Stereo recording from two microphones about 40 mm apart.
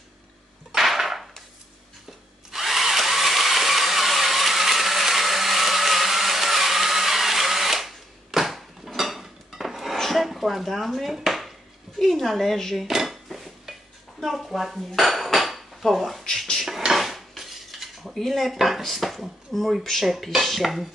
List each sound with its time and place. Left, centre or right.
0.7 s a sound: centre
2.5 s drill: centre
9.9 s chopping: centre
12.0 s a woman's voice: centre
12.8 s dishes: centre
18.3 s speech: centre